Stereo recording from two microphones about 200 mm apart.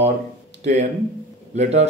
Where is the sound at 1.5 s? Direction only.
35° right (ahead or behind).